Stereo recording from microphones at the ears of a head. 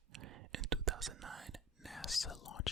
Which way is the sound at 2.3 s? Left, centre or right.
Left.